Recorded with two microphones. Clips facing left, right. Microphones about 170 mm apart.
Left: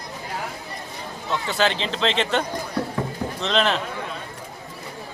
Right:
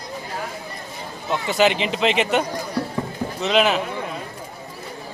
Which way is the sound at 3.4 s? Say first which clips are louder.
Right 4 dB; 10° right (ahead or behind).